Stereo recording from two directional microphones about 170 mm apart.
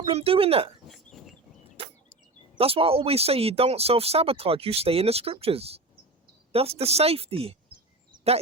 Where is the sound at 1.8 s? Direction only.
35° right (ahead or behind).